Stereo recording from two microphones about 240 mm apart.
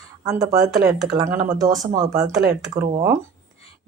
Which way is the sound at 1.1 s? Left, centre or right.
Centre.